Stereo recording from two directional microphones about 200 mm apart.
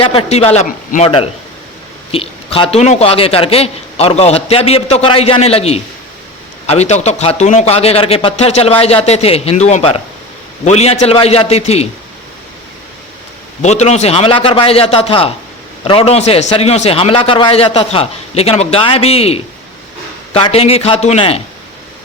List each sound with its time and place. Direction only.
0.0 s a man's voice: 30° left (ahead or behind)
2.1 s a man's voice: 30° left (ahead or behind)
13.6 s a man's voice: 35° left (ahead or behind)